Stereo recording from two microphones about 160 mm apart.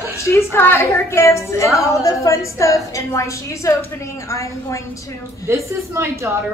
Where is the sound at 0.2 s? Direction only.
15° left (ahead or behind).